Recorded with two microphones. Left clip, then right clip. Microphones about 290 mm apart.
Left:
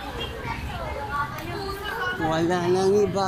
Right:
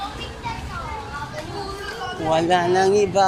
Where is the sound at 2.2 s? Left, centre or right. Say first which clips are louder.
Right 7 dB; right.